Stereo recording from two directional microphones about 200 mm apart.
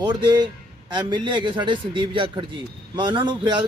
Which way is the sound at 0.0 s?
20° right (ahead or behind).